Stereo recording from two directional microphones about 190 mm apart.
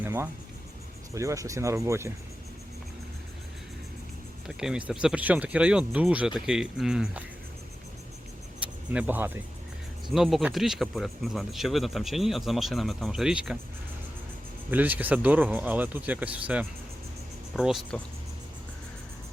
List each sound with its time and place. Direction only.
0.0 s speech: 10° right (ahead or behind)
4.4 s speech: 5° right (ahead or behind)
8.6 s speech: 5° right (ahead or behind)
14.7 s speech: 10° right (ahead or behind)